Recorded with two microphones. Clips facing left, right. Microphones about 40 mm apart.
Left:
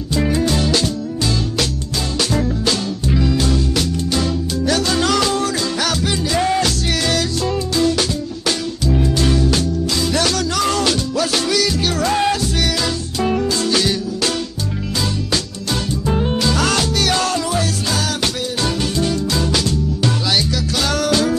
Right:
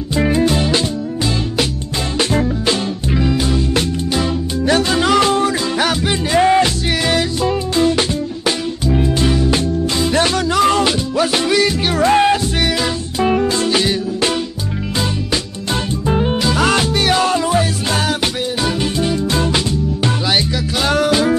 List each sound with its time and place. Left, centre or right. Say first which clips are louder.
0.1 s music: right 3 dB; right
2.4 s music: right 2 dB; centre
4.6 s music: right 3 dB; right
16.1 s music: right 2 dB; centre
19.3 s music: right 2 dB; right
20.8 s music: right 3 dB; right